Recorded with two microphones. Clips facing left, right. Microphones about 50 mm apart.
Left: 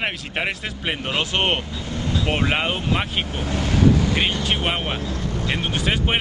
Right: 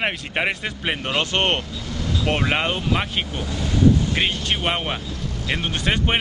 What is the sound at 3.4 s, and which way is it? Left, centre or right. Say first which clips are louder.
Vehicle: left 3 dB; left.